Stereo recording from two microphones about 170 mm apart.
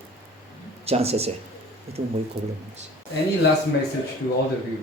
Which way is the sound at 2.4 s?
75° right (ahead or behind).